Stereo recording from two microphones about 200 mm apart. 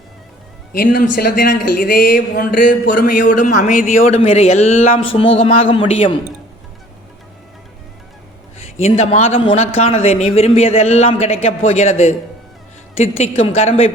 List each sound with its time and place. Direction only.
0.7 s a man's voice: 45° left (ahead or behind); by 6.1 s 25° left (ahead or behind)
8.8 s a man's voice: 35° left (ahead or behind)